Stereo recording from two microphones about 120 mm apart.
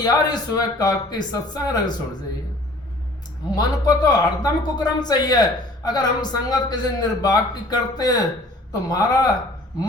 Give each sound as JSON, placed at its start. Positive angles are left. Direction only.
{"t": 0.0, "sound": "speech", "side_deg": 35}
{"t": 3.5, "sound": "speech", "side_deg": 35}